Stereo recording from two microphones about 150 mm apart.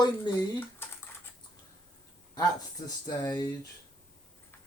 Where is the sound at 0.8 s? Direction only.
15° left (ahead or behind).